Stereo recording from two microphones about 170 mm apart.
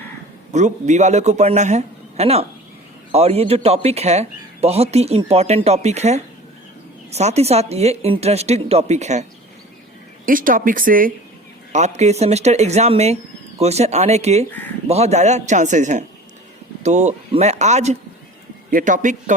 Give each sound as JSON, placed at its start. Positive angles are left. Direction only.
{"t": 0.5, "sound": "speech", "side_deg": -45}
{"t": 10.2, "sound": "a man's voice", "side_deg": -55}
{"t": 11.7, "sound": "a man's voice", "side_deg": -40}